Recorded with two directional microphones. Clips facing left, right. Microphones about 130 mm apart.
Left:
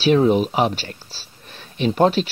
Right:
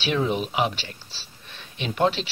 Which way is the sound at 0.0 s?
40° left (ahead or behind).